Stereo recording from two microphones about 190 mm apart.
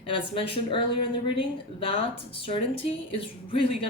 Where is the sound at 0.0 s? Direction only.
25° left (ahead or behind).